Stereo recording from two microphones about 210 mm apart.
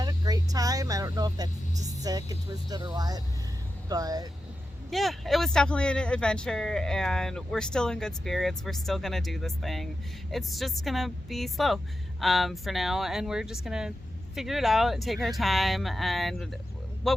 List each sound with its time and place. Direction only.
0.0 s vehicle: 15° right (ahead or behind)
2.0 s speech: 15° right (ahead or behind)
4.9 s a man's voice: centre (ahead or behind)